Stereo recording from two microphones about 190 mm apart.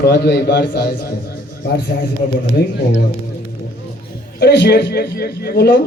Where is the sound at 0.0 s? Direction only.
60° left (ahead or behind).